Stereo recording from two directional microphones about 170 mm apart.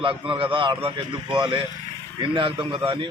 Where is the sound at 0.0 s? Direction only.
30° right (ahead or behind).